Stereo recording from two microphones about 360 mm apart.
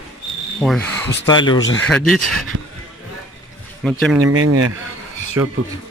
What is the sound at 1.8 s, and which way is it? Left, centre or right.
Speech, centre.